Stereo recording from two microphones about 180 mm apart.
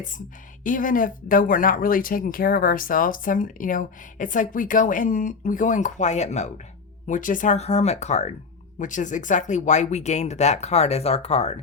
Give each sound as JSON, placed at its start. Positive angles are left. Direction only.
{"t": 0.6, "sound": "speech", "side_deg": 50}